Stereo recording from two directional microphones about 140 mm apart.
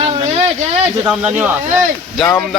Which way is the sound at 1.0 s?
10° right (ahead or behind).